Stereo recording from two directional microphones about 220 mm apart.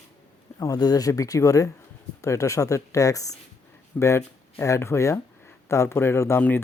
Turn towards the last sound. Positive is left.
turn(degrees=10)  # may be behind; listen again after turning